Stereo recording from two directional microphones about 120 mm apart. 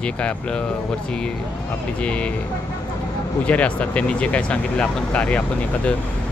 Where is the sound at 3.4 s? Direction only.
10° left (ahead or behind).